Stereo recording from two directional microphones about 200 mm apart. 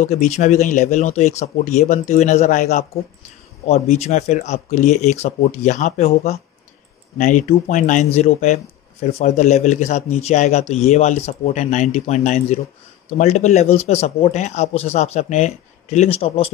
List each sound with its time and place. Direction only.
0.0 s a man's voice: 35° left (ahead or behind)